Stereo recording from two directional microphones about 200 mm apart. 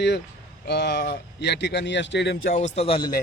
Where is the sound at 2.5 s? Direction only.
40° left (ahead or behind).